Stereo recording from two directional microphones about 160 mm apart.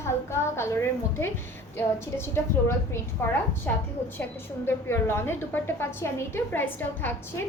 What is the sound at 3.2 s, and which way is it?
Speech, 15° left (ahead or behind).